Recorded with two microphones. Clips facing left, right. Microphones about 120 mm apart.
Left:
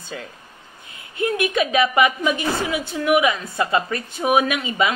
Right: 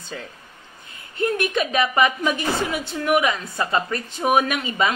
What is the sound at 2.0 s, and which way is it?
Speech, 15° left (ahead or behind).